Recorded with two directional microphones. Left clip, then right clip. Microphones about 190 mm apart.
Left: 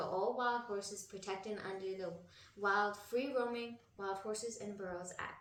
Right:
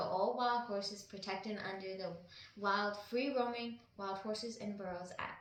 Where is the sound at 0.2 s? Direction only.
25° left (ahead or behind).